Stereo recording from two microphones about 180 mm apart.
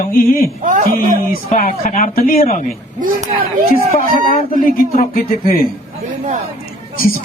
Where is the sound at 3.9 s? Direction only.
55° left (ahead or behind).